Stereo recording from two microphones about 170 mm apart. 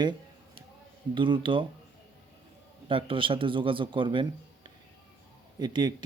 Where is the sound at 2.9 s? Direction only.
30° right (ahead or behind).